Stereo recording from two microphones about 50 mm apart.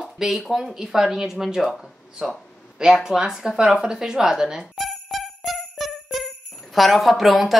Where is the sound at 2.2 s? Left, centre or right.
Centre.